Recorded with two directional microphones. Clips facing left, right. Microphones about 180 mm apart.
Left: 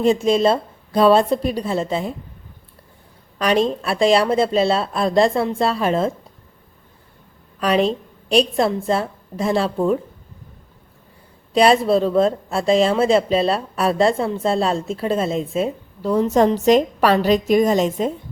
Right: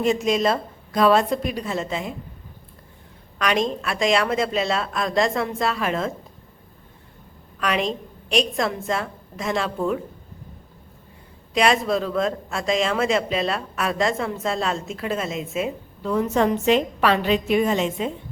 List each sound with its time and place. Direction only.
0.0 s speech: 30° left (ahead or behind)
3.3 s speech: 35° left (ahead or behind)
7.6 s a woman's voice: 35° left (ahead or behind)
11.5 s speech: 35° left (ahead or behind)